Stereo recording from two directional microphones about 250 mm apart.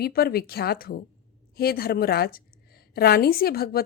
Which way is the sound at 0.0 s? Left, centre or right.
Left.